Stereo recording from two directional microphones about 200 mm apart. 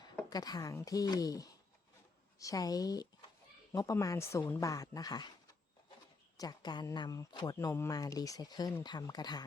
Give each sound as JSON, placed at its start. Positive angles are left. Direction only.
{"t": 0.3, "sound": "a woman's voice", "side_deg": 20}
{"t": 6.3, "sound": "speech", "side_deg": 20}